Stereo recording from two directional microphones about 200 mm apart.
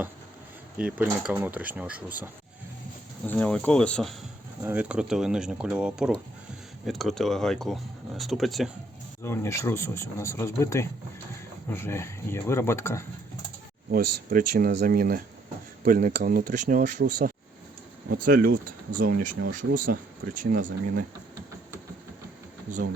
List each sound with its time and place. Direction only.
0.8 s speech: 5° right (ahead or behind)
3.2 s speech: 10° left (ahead or behind)
4.6 s speech: 10° right (ahead or behind)
9.2 s speech: 10° left (ahead or behind)
13.9 s speech: 45° right (ahead or behind)
22.7 s speech: 40° right (ahead or behind)